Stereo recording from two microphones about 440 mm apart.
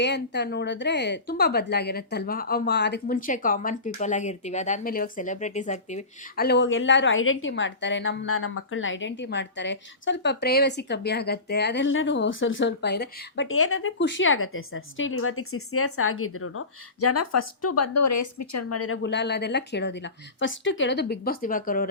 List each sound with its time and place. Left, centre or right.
0.0 s a woman's voice: left